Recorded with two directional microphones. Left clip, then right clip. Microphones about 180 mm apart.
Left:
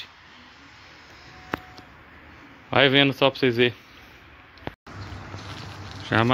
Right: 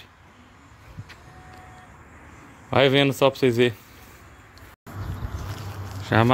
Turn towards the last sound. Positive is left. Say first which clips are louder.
# right 1 dB
turn(degrees=-5)  # may be behind; listen again after turning